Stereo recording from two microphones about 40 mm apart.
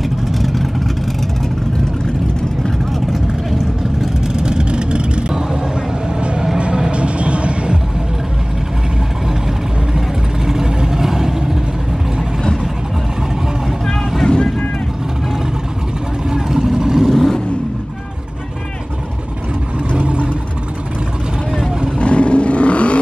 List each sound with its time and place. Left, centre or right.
0.4 s vehicle: centre
3.1 s vehicle: centre
4.4 s vehicle: right
6.6 s music: right
9.9 s vehicle: centre
14.2 s vehicle: centre
16.3 s vehicle: centre
17.1 s vehicle: centre
21.9 s vehicle: left